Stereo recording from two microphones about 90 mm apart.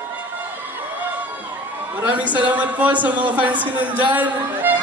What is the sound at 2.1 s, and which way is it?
A man's voice, 15° right (ahead or behind).